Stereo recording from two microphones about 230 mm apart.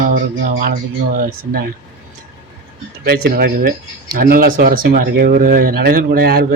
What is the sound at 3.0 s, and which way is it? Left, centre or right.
Speech, right.